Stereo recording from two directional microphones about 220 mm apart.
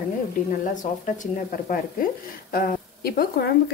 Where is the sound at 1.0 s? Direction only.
40° left (ahead or behind).